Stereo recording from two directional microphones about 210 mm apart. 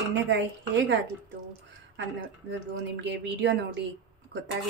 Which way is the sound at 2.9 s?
55° right (ahead or behind).